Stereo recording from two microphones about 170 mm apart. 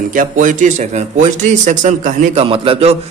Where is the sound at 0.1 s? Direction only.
50° right (ahead or behind).